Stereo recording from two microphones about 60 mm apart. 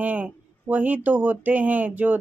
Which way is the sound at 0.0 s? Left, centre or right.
Right.